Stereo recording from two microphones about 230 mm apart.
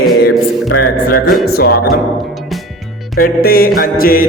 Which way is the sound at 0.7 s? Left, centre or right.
Left.